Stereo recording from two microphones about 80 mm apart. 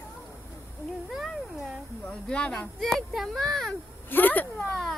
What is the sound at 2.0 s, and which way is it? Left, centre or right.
Speech, centre.